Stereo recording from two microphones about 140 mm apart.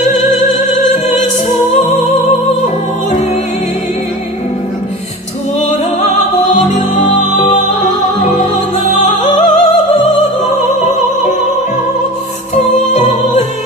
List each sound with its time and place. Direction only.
1.5 s music: 55° left (ahead or behind)
7.0 s music: 60° left (ahead or behind)
12.7 s music: 60° left (ahead or behind)